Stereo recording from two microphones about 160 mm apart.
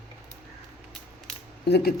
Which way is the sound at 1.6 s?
90° left.